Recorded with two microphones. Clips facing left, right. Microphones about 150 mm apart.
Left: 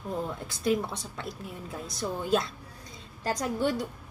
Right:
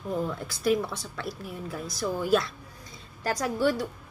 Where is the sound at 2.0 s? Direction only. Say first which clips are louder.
Right 3 dB; 25° left (ahead or behind).